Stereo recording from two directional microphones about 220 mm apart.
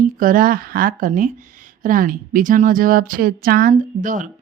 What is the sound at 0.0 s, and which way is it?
A woman's voice, 40° right (ahead or behind).